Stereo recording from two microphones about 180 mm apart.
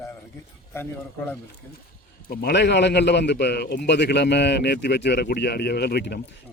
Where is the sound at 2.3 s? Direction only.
60° left (ahead or behind).